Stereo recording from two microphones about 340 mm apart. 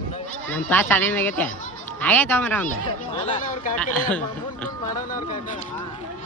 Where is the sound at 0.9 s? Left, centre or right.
Centre.